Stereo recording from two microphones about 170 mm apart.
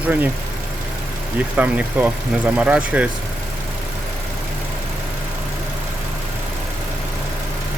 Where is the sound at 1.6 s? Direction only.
10° right (ahead or behind).